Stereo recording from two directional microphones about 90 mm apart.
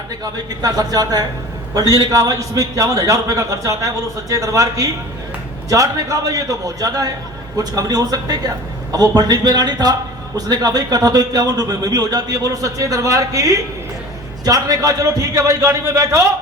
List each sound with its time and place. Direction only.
0.6 s a man's voice: 45° right (ahead or behind)